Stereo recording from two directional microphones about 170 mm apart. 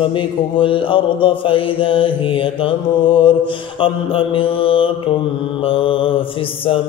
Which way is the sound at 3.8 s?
30° left (ahead or behind).